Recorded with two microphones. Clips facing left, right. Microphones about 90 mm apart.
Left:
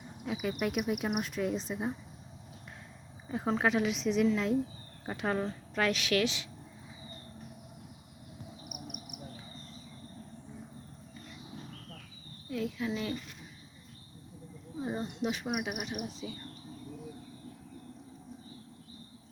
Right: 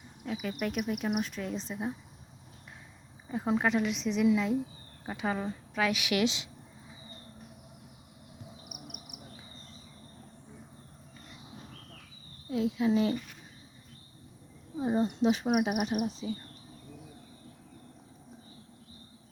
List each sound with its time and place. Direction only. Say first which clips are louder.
0.3 s speech: left 1 dB; 5° left (ahead or behind)
3.2 s a woman's voice: right 1 dB; centre (ahead or behind); by 6.5 s 20° right (ahead or behind)
12.5 s speech: right 6 dB; 25° right (ahead or behind)
14.8 s speech: right 7 dB; 20° right (ahead or behind)
15.2 s speech: right 6 dB; 35° right (ahead or behind)